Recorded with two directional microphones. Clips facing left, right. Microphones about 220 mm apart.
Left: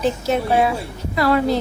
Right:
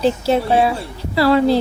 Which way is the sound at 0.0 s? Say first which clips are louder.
Right 3 dB; 30° right (ahead or behind).